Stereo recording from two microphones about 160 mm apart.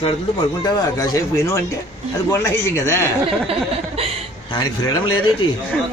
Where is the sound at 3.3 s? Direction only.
40° right (ahead or behind).